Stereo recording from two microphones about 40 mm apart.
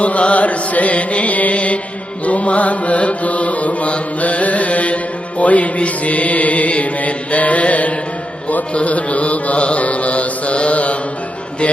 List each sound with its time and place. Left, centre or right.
0.0 s music: left